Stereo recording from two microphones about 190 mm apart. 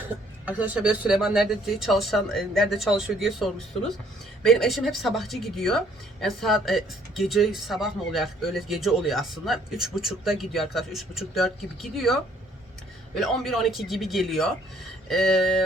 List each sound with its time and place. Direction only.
0.4 s speech: 10° right (ahead or behind)